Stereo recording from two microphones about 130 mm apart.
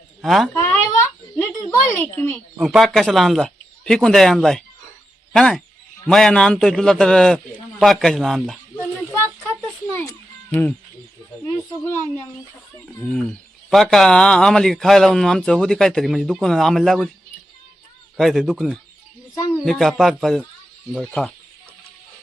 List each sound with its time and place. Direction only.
0.2 s speech: centre (ahead or behind)
0.5 s a sound: 20° left (ahead or behind)
2.6 s speech: centre (ahead or behind)
9.1 s a sound: 20° left (ahead or behind)
9.9 s music: 15° left (ahead or behind)
12.8 s speech: 5° left (ahead or behind)
18.2 s speech: centre (ahead or behind)